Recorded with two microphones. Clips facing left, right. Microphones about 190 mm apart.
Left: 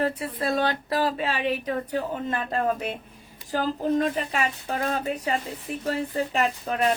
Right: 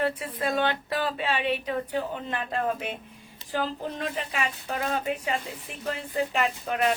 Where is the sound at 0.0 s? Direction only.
35° left (ahead or behind).